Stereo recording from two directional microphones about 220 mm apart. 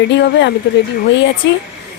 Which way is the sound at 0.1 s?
50° left (ahead or behind).